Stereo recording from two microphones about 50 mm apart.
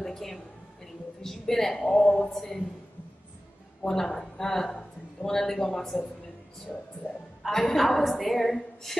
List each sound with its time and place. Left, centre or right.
0.0 s a sound: centre
1.2 s speech: centre
3.8 s speech: centre
7.0 s a man's voice: right
7.4 s a woman's voice: centre